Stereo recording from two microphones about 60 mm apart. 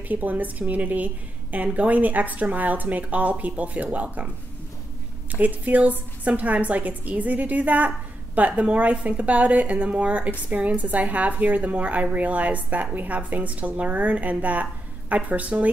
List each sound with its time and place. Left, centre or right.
0.1 s a woman's voice: right
5.3 s a woman's voice: right